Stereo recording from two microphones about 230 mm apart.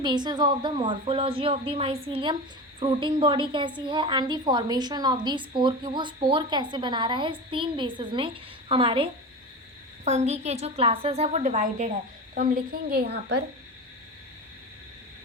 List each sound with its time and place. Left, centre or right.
0.0 s a woman's voice: centre; by 13.4 s right